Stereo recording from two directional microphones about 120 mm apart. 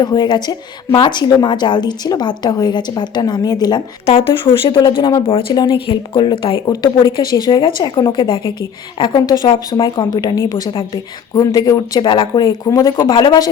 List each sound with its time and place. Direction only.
0.0 s a woman's voice: 35° left (ahead or behind)
4.0 s a woman's voice: 55° left (ahead or behind); by 12.9 s 30° left (ahead or behind)
13.0 s a woman's voice: 40° left (ahead or behind)